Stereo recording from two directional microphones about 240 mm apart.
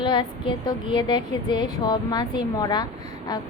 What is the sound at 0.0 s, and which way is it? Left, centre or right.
A woman's voice, centre.